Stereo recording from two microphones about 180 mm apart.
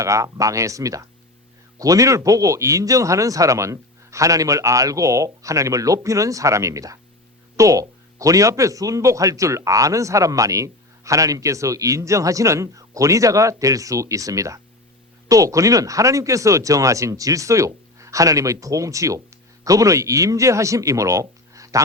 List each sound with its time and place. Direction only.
0.0 s a man's voice: 15° right (ahead or behind)